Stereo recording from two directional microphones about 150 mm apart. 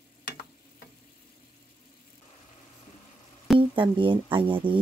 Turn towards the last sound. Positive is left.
turn(degrees=-35)  # may be behind; listen again after turning